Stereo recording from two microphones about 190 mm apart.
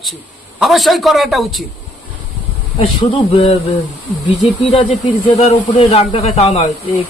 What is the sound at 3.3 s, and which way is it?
Speech, 30° left (ahead or behind).